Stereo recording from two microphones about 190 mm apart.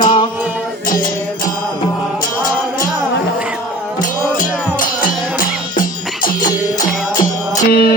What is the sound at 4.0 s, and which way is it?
Music, 45° left (ahead or behind).